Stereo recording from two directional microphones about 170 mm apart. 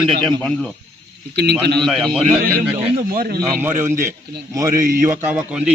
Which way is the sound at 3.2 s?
60° right (ahead or behind).